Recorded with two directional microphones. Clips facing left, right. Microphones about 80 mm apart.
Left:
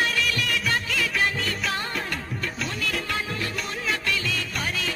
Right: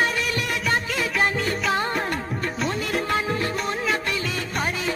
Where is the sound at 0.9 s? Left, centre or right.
Right.